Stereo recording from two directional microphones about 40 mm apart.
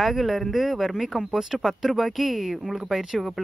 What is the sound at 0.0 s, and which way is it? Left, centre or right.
Speech, centre.